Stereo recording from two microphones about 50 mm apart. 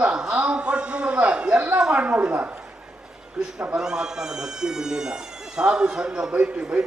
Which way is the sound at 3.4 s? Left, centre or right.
Centre.